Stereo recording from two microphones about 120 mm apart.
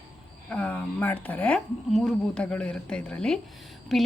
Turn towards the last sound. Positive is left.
turn(degrees=0)  # may be behind; listen again after turning